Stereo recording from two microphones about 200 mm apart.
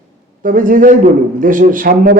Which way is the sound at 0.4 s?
45° right (ahead or behind).